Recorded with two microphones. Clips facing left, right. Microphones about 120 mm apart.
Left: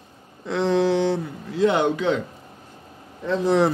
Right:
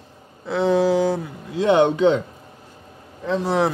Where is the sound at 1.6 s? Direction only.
20° right (ahead or behind).